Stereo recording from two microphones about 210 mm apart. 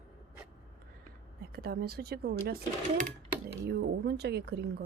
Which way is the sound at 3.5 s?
50° right (ahead or behind).